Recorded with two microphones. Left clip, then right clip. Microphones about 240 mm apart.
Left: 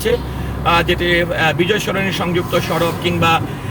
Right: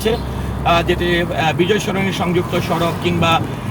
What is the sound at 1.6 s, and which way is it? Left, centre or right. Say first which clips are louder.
Speech: even; left.